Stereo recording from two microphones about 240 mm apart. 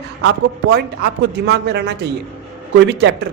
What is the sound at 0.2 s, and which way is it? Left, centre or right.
A man's voice, right.